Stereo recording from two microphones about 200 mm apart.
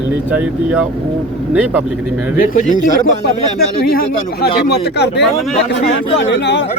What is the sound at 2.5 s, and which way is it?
Speech, 40° left (ahead or behind).